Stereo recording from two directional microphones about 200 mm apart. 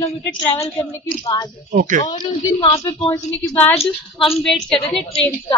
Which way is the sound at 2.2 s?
25° left (ahead or behind).